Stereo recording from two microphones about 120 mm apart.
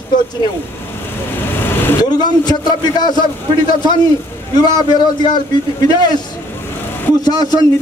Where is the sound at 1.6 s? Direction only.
15° left (ahead or behind).